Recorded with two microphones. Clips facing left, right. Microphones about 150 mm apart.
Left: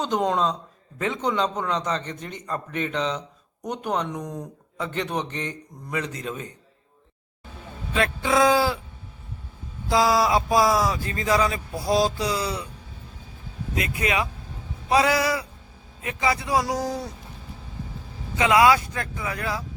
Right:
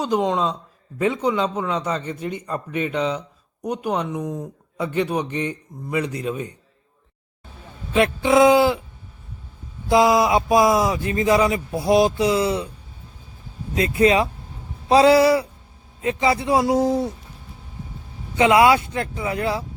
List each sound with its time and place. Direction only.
0.0 s speech: 5° right (ahead or behind)
7.9 s speech: 25° right (ahead or behind)
9.9 s speech: 20° right (ahead or behind)
13.7 s speech: 30° right (ahead or behind)
18.3 s speech: 25° right (ahead or behind)